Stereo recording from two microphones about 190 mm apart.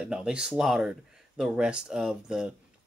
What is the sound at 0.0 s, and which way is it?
Speech, 5° right (ahead or behind).